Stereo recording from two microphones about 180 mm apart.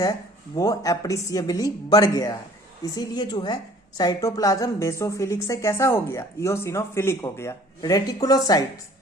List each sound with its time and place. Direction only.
0.5 s a woman's voice: 20° left (ahead or behind)